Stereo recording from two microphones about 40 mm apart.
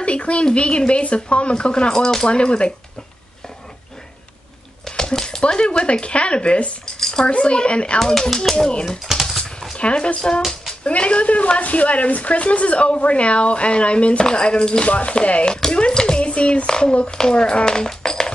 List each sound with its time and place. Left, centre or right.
0.0 s a sound: left
0.6 s speech: left
2.2 s speech: left
4.8 s a sound: centre
5.4 s speech: left
7.0 s dishes: centre
7.2 s speech: left
8.0 s speech: centre
9.8 s speech: left
14.9 s speech: left
15.4 s a sound: left
16.6 s speech: centre